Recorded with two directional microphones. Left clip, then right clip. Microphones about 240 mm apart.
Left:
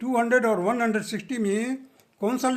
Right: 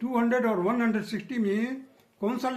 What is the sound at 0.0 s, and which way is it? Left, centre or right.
Speech, left.